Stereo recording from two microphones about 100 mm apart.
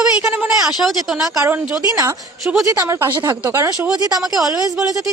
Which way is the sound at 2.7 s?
25° right (ahead or behind).